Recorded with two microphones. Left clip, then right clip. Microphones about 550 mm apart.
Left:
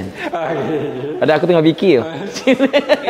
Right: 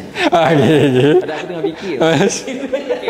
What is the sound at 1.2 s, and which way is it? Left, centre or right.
Speech, left.